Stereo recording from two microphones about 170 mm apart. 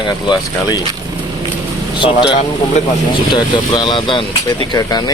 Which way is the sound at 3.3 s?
25° left (ahead or behind).